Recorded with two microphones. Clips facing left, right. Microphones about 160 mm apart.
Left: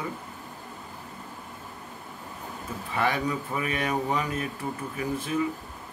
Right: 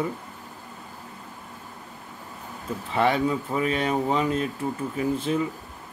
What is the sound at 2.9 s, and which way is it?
Speech, 25° right (ahead or behind).